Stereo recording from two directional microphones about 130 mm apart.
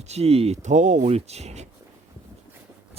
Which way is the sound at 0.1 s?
50° right (ahead or behind).